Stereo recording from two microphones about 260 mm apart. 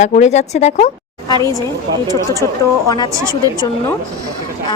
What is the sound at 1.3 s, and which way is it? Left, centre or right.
Speech, centre.